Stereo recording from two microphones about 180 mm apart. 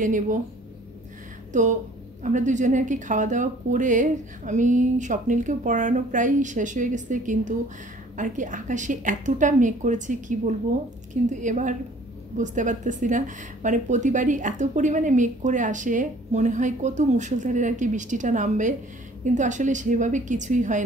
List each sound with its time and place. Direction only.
0.0 s speech: 45° right (ahead or behind)
1.5 s speech: 45° right (ahead or behind)